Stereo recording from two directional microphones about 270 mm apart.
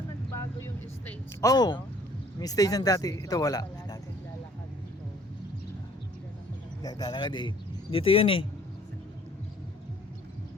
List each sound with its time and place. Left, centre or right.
0.3 s vehicle: centre
2.4 s speech: centre
6.8 s speech: centre